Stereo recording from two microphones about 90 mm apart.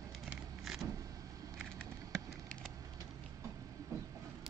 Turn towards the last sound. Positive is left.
turn(degrees=-40)  # may be behind; listen again after turning